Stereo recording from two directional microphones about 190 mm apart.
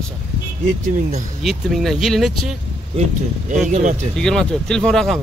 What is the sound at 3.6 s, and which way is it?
Speech, 40° right (ahead or behind).